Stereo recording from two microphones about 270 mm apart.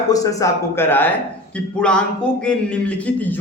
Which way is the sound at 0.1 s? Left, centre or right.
Centre.